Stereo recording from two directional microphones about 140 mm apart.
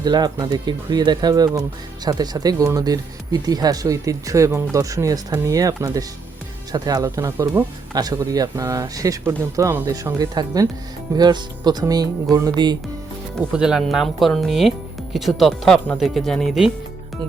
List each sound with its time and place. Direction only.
0.0 s speech: 30° right (ahead or behind)
13.5 s speech: 5° right (ahead or behind)